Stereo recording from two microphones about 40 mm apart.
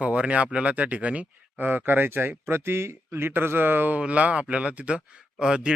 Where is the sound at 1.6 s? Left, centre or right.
Right.